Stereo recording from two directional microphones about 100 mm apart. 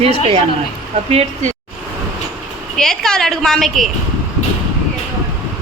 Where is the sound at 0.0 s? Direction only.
80° right.